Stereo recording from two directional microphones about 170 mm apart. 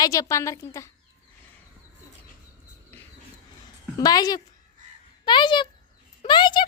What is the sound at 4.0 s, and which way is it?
A woman's voice, 20° left (ahead or behind).